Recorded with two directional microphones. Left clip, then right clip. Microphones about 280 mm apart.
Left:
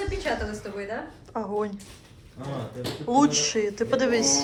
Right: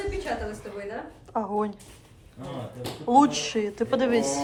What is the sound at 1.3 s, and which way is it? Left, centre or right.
Speech, centre.